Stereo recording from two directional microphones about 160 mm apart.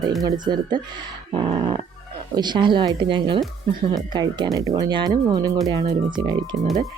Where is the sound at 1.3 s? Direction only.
35° right (ahead or behind).